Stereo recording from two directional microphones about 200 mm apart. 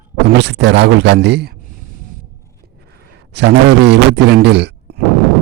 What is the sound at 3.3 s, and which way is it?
Speech, 60° right (ahead or behind).